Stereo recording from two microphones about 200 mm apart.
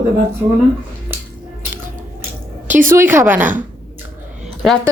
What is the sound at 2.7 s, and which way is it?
Speech, 10° right (ahead or behind).